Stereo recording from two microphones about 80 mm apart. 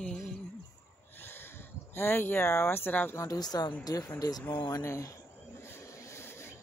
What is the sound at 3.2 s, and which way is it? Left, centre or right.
A woman's voice, left.